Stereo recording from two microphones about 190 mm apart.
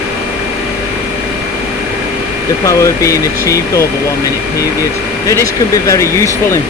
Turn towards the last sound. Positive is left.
turn(degrees=15)  # may be behind; listen again after turning